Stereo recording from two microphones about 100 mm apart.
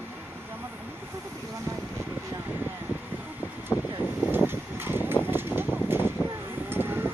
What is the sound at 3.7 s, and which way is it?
Vehicle, 30° left (ahead or behind).